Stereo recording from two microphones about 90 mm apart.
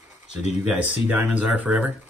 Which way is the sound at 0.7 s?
20° right (ahead or behind).